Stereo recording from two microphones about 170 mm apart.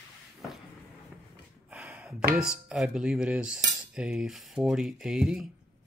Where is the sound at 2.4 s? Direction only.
5° right (ahead or behind).